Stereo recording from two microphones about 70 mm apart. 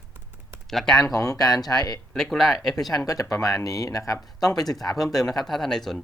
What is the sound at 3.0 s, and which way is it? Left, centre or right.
Speech, left.